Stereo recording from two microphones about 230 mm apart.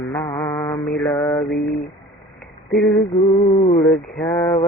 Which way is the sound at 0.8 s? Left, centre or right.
Centre.